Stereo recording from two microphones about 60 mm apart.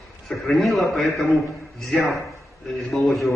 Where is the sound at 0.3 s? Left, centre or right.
Centre.